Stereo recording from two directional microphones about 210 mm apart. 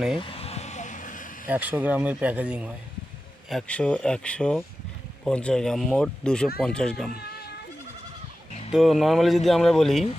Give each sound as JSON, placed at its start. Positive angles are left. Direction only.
{"t": 0.2, "sound": "vehicle", "side_deg": 25}
{"t": 1.5, "sound": "speech", "side_deg": -5}
{"t": 3.5, "sound": "speech", "side_deg": 5}
{"t": 8.7, "sound": "speech", "side_deg": 0}